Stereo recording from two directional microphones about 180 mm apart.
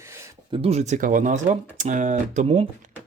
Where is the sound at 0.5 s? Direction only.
35° right (ahead or behind).